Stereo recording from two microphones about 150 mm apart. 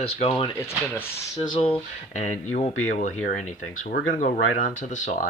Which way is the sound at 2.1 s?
55° left (ahead or behind).